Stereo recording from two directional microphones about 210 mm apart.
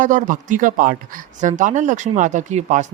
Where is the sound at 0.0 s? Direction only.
40° right (ahead or behind).